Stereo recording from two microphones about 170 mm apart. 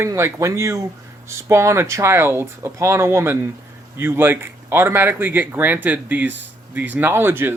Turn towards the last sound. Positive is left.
turn(degrees=-15)  # may be behind; listen again after turning